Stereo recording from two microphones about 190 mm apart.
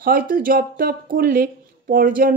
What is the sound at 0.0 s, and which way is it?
Speech, 50° right (ahead or behind).